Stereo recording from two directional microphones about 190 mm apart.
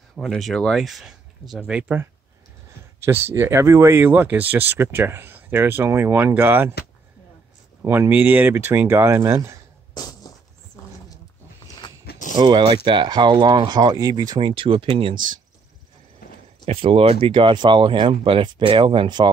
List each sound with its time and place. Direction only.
0.1 s speech: centre (ahead or behind)
3.1 s speech: 10° right (ahead or behind)
7.8 s speech: 15° right (ahead or behind)
9.9 s a sound: 20° left (ahead or behind)
12.1 s a sound: 45° left (ahead or behind)
12.4 s speech: 25° right (ahead or behind)
16.6 s speech: 30° right (ahead or behind)